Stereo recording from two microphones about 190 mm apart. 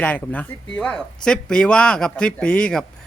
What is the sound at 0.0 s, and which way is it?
Speech, 5° left (ahead or behind).